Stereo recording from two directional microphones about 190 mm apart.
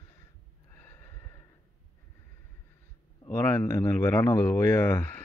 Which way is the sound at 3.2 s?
15° left (ahead or behind).